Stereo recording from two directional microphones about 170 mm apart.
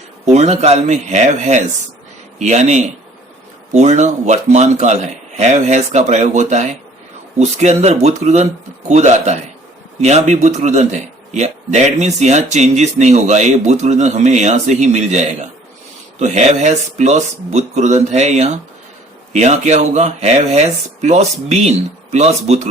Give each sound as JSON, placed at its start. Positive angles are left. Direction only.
{"t": 0.3, "sound": "speech", "side_deg": -40}